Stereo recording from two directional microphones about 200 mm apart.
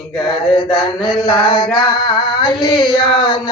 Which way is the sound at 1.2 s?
20° left (ahead or behind).